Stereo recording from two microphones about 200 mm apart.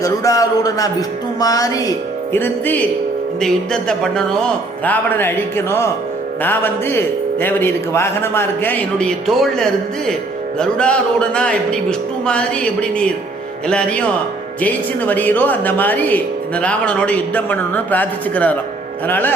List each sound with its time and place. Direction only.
0.0 s a man's voice: 15° left (ahead or behind)